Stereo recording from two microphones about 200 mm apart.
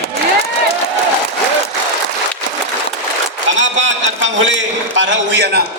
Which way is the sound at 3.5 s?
70° right (ahead or behind).